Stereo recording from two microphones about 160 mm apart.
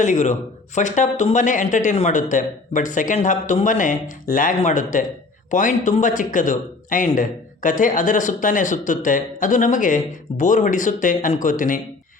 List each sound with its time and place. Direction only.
0.0 s a man's voice: 50° left (ahead or behind)